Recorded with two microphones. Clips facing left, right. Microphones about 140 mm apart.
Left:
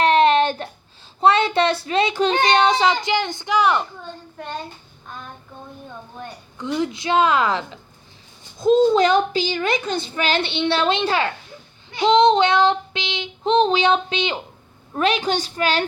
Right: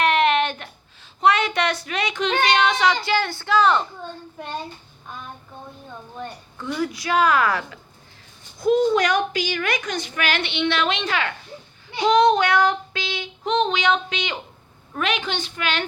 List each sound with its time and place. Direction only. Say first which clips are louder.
0.0 s a sound: left 4 dB; 30° left (ahead or behind)
1.2 s a woman's voice: left 3 dB; 30° left (ahead or behind); by 3.8 s 15° left (ahead or behind)
6.6 s a woman's voice: left 3 dB; 20° left (ahead or behind)